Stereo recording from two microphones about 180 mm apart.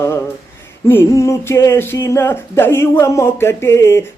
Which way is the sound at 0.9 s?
15° left (ahead or behind).